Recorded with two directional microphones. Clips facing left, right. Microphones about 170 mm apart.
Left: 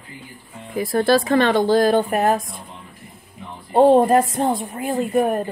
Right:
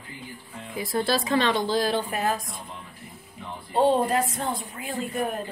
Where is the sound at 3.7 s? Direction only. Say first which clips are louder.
Left 8 dB; 55° left (ahead or behind).